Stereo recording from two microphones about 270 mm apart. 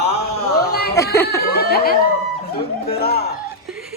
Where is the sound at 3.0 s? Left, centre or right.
Left.